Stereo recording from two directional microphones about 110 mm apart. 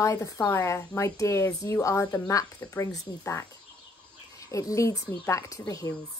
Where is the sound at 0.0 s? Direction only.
30° left (ahead or behind).